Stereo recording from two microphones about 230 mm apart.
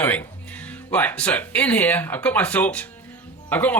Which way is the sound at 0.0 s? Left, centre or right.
Centre.